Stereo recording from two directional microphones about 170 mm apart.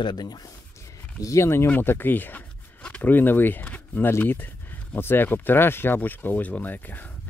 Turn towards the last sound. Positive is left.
turn(degrees=10)  # may be behind; listen again after turning